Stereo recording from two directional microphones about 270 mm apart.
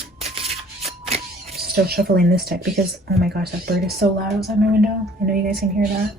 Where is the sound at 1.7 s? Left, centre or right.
Right.